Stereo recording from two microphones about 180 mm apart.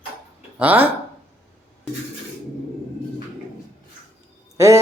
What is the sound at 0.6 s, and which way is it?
Speech, 10° right (ahead or behind).